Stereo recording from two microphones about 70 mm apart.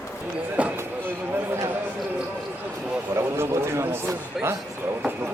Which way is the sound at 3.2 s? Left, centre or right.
Right.